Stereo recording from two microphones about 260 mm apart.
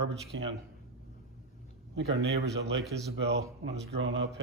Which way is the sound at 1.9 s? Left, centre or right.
Right.